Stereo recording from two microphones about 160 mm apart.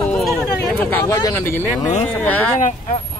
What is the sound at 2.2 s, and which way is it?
Speech, 10° left (ahead or behind).